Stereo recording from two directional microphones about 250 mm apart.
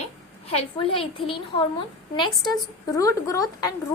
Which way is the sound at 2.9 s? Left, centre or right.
Centre.